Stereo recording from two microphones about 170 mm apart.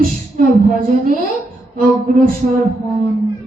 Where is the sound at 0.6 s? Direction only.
55° right (ahead or behind).